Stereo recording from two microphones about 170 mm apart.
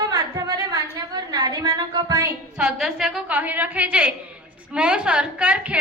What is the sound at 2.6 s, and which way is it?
A woman's voice, centre (ahead or behind).